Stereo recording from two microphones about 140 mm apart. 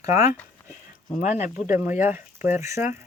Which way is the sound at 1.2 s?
60° left (ahead or behind).